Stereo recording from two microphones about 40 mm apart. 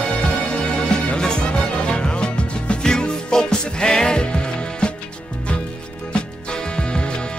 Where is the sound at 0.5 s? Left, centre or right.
Left.